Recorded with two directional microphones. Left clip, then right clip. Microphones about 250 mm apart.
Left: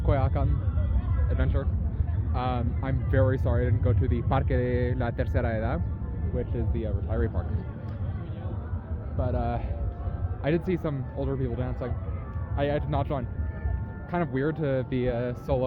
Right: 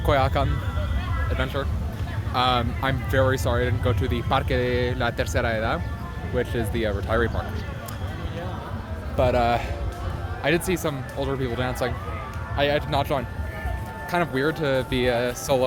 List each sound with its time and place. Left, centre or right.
0.0 s music: centre
1.3 s speech: centre
6.3 s speech: right
9.1 s speech: right
10.4 s speech: centre
12.5 s speech: centre